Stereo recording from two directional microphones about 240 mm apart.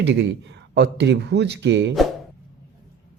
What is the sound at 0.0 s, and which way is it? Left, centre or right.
Speech, right.